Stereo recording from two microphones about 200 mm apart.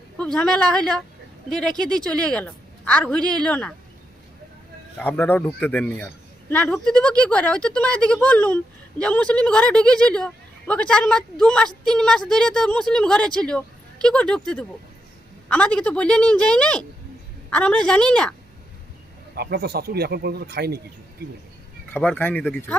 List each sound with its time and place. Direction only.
0.2 s speech: 5° left (ahead or behind)
4.9 s speech: 5° left (ahead or behind)
19.3 s speech: 55° right (ahead or behind)
21.9 s speech: 10° left (ahead or behind)